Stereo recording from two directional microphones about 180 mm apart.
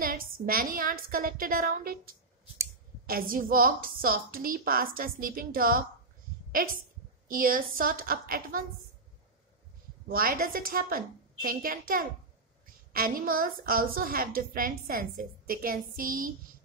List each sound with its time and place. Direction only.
0.0 s a woman's voice: 55° right (ahead or behind)
7.2 s a woman's voice: 50° right (ahead or behind)
10.0 s a woman's voice: 55° right (ahead or behind)